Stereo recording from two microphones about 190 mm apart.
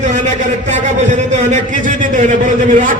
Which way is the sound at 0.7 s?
40° right (ahead or behind).